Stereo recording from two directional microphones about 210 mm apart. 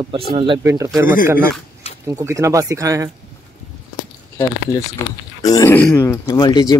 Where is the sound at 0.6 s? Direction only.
15° right (ahead or behind).